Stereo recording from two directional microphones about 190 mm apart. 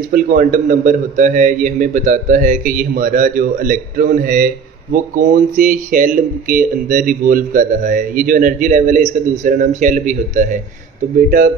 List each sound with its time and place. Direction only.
0.1 s speech: 50° right (ahead or behind)